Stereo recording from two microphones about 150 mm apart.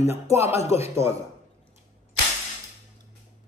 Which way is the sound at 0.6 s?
45° left (ahead or behind).